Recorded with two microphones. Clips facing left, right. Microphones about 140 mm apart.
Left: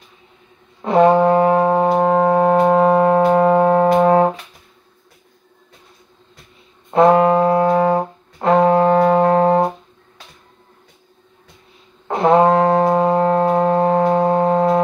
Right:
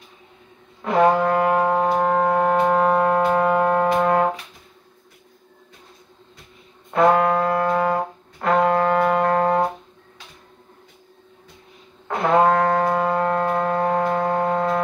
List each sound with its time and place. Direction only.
0.8 s music: 25° left (ahead or behind)
6.9 s brass instrument: 25° left (ahead or behind)
12.1 s music: 25° left (ahead or behind)